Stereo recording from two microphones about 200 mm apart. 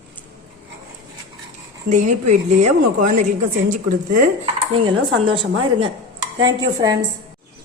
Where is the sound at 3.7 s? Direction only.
40° right (ahead or behind).